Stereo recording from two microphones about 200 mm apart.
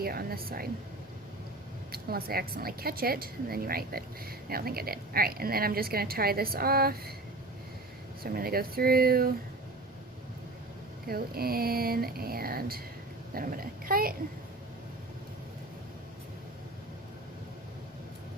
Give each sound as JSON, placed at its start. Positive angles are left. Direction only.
{"t": 0.0, "sound": "a woman's voice", "side_deg": -50}
{"t": 1.9, "sound": "a woman's voice", "side_deg": -50}
{"t": 8.2, "sound": "a woman's voice", "side_deg": -50}
{"t": 11.1, "sound": "a woman's voice", "side_deg": -50}